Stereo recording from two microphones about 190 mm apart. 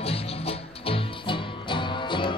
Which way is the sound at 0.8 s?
25° left (ahead or behind).